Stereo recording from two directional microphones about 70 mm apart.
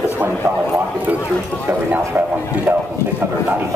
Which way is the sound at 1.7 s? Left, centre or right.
Right.